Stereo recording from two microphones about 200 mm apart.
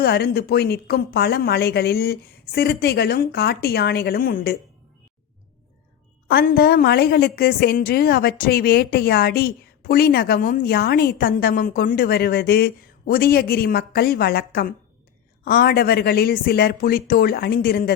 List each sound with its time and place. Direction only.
0.0 s a woman's voice: 55° left (ahead or behind)
6.2 s a woman's voice: 50° left (ahead or behind)